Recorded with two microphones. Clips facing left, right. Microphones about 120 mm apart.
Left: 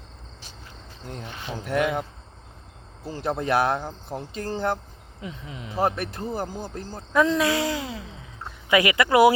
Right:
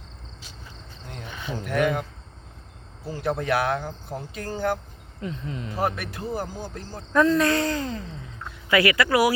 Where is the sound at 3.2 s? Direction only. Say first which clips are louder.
Left 1 dB; 30° left (ahead or behind).